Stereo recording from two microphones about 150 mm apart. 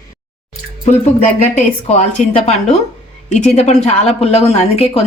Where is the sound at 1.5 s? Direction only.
50° left (ahead or behind).